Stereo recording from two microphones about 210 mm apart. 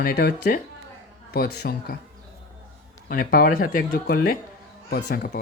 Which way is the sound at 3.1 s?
40° left (ahead or behind).